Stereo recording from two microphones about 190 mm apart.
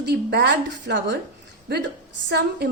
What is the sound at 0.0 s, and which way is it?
A woman's voice, 60° right (ahead or behind).